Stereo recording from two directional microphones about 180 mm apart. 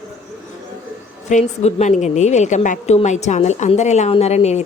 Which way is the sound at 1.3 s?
40° left (ahead or behind).